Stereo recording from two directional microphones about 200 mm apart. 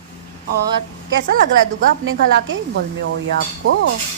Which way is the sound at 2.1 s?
70° right (ahead or behind).